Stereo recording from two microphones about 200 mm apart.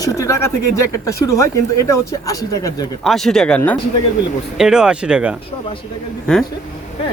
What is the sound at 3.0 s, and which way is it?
Speech, centre (ahead or behind).